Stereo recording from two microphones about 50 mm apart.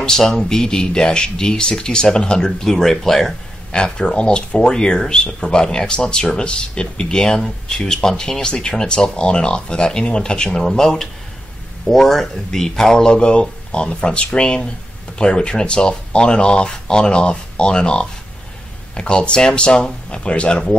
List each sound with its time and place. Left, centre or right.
0.0 s speech: centre